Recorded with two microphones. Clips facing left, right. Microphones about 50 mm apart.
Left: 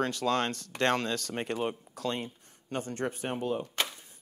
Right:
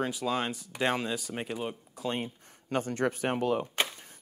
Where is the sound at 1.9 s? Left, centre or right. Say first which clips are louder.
Even; centre.